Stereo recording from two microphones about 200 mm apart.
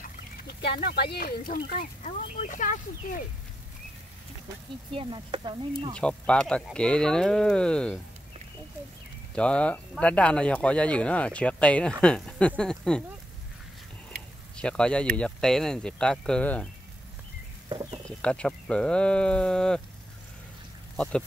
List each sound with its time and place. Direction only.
0.0 s speech: 50° left (ahead or behind)
2.0 s speech: 35° left (ahead or behind)
4.9 s speech: 25° right (ahead or behind)
5.9 s speech: 5° left (ahead or behind)
9.3 s speech: 5° left (ahead or behind)
14.6 s speech: 5° left (ahead or behind)
18.2 s speech: 5° left (ahead or behind)
20.9 s speech: 5° left (ahead or behind)